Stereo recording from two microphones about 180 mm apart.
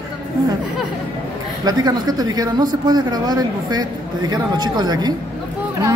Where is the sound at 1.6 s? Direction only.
20° right (ahead or behind).